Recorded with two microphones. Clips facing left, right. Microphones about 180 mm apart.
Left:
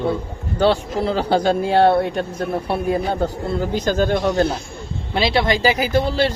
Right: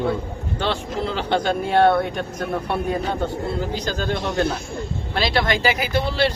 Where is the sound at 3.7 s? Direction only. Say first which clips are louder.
Left 6 dB; 50° left (ahead or behind).